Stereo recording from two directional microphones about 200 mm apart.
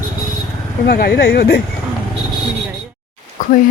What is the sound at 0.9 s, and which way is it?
Speech, 50° left (ahead or behind).